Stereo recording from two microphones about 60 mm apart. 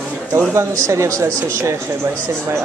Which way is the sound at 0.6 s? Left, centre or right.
Right.